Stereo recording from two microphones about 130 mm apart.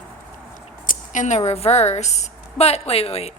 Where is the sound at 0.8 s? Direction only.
75° left (ahead or behind).